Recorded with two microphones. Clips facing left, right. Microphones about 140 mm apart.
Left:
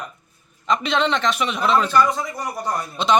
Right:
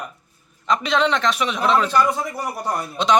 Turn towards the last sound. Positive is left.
turn(degrees=0)  # may be behind; listen again after turning